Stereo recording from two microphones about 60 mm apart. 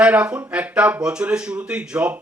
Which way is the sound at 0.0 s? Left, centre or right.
Centre.